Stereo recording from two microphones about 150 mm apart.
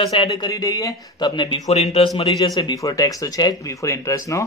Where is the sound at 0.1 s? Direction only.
25° left (ahead or behind).